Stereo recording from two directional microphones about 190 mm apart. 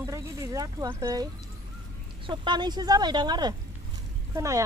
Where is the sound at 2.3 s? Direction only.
25° right (ahead or behind).